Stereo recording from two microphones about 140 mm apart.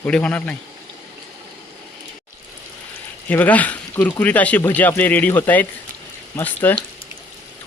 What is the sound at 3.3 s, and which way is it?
Speech, 10° left (ahead or behind).